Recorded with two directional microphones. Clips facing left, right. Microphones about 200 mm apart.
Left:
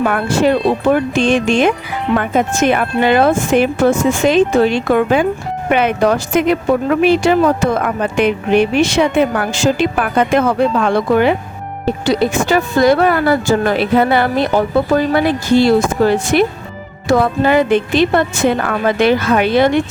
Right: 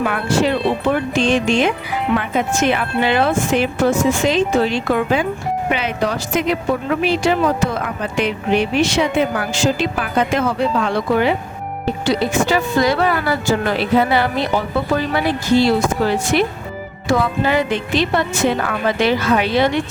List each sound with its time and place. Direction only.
0.0 s speech: 50° left (ahead or behind)